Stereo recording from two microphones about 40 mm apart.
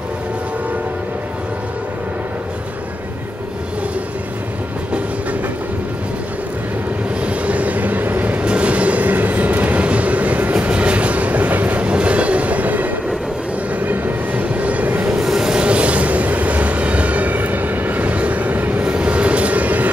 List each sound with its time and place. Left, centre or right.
7.2 s train: right
8.4 s train: right
15.1 s train: centre
15.5 s train: right
18.9 s train: right